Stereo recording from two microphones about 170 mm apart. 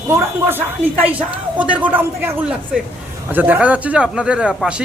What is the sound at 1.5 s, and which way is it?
A man's voice, 10° right (ahead or behind).